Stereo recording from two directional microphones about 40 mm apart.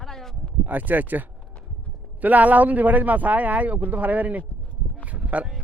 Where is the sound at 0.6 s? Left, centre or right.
Right.